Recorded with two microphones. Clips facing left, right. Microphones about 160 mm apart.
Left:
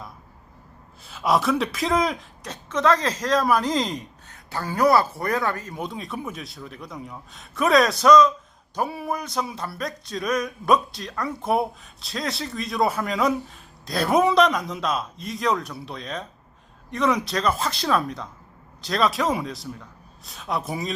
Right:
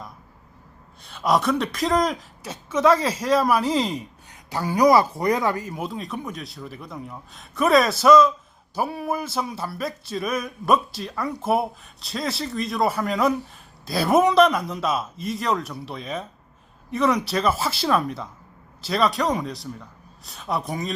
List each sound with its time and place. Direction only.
1.0 s speech: centre (ahead or behind); by 5.7 s 15° right (ahead or behind)
5.7 s speech: centre (ahead or behind)